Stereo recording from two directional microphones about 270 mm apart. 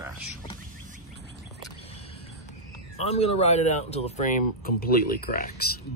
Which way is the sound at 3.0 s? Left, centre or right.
Left.